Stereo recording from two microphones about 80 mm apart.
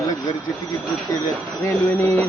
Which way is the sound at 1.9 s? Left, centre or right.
Left.